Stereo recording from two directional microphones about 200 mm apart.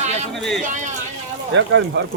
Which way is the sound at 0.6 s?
40° right (ahead or behind).